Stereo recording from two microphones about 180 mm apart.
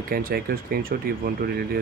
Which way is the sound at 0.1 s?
55° right (ahead or behind).